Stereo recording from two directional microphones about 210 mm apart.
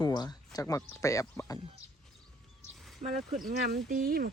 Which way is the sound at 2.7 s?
Centre (ahead or behind).